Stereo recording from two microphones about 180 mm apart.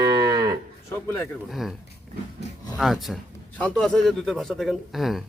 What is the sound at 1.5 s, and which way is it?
Speech, centre (ahead or behind).